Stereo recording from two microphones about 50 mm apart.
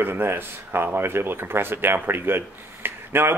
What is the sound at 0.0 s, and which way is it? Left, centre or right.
Speech, right.